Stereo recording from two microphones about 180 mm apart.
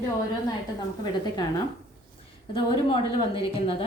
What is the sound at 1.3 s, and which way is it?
A woman's voice, 20° left (ahead or behind).